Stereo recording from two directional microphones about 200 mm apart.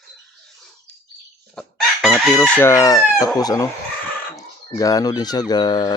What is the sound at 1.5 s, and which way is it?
Chicken, centre (ahead or behind).